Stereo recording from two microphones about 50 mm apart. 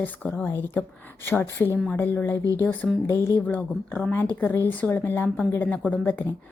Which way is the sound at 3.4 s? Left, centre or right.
Left.